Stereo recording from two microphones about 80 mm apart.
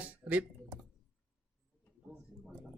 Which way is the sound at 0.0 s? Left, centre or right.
Centre.